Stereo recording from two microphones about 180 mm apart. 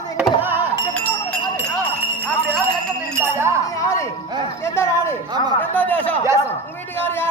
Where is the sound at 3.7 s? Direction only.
20° left (ahead or behind).